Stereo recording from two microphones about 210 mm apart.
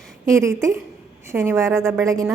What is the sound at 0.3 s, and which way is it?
A woman's voice, 15° right (ahead or behind).